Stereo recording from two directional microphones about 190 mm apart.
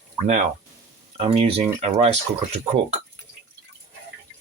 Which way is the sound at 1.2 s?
30° right (ahead or behind).